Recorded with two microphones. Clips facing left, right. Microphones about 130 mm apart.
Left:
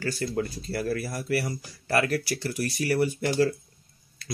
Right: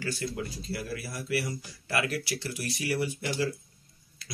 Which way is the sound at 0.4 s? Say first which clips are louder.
Left 6 dB; 45° left (ahead or behind).